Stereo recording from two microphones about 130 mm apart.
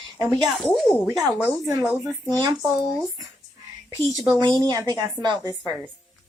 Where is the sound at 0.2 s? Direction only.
30° right (ahead or behind).